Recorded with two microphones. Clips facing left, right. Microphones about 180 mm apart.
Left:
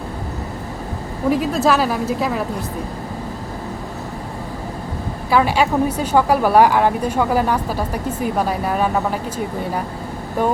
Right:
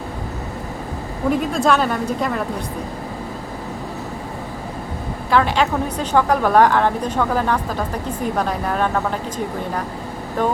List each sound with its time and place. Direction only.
1.3 s speech: 5° left (ahead or behind)
5.3 s a woman's voice: 10° left (ahead or behind)